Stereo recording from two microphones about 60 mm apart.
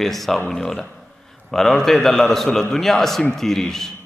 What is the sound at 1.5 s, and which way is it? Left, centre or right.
A man's voice, centre.